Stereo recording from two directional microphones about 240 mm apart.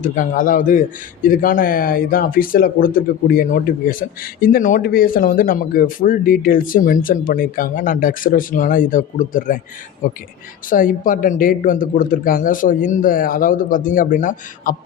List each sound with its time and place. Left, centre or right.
0.0 s speech: left
10.7 s speech: left